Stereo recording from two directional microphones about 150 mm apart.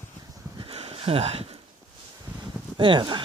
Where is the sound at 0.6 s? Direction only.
40° right (ahead or behind).